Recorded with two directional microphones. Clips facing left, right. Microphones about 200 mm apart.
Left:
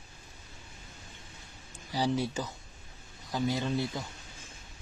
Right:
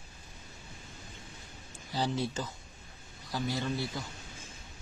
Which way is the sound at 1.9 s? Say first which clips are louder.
Left 2 dB; 10° left (ahead or behind).